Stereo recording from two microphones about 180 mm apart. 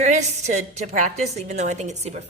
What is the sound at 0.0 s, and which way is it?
A woman's voice, 40° right (ahead or behind).